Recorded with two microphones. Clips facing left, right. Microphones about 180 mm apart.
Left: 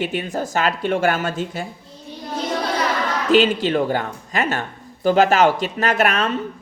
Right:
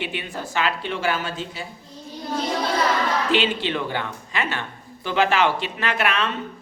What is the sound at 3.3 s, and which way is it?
A woman's voice, 40° left (ahead or behind).